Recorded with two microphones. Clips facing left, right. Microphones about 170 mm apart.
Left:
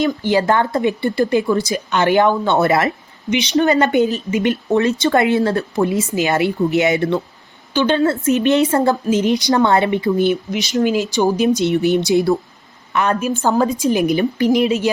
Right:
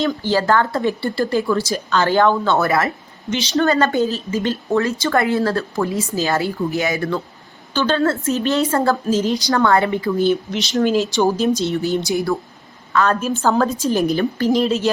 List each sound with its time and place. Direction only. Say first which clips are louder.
0.0 s speech: left 2 dB; 15° left (ahead or behind)
10.5 s a woman's voice: even; 10° left (ahead or behind)